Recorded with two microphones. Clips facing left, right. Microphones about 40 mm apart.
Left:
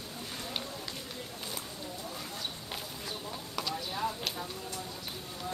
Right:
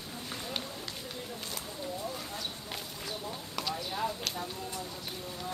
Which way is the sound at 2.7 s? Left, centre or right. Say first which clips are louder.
Even; centre.